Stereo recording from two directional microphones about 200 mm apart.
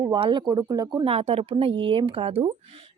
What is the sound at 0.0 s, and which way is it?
Speech, 25° right (ahead or behind).